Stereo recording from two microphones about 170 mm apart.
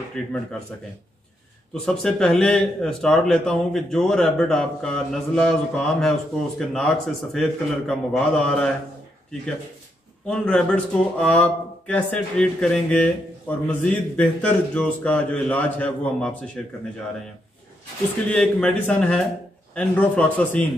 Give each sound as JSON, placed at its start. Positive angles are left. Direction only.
{"t": 0.1, "sound": "a man's voice", "side_deg": 5}
{"t": 1.7, "sound": "a man's voice", "side_deg": 5}
{"t": 10.2, "sound": "speech", "side_deg": 5}
{"t": 18.3, "sound": "a man's voice", "side_deg": 5}